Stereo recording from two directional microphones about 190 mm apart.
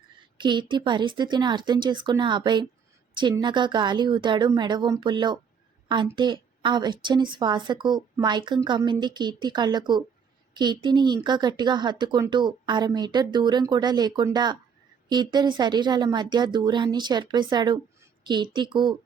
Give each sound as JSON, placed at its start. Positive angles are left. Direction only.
{"t": 0.3, "sound": "a woman's voice", "side_deg": -25}
{"t": 18.2, "sound": "a sound", "side_deg": -25}
{"t": 18.5, "sound": "a woman's voice", "side_deg": -25}